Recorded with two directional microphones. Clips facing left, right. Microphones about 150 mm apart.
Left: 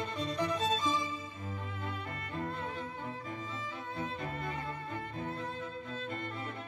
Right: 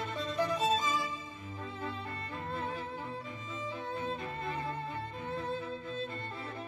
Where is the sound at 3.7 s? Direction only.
30° right (ahead or behind).